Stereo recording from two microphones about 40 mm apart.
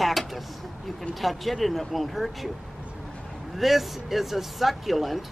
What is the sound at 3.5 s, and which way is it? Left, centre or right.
A woman's voice, centre.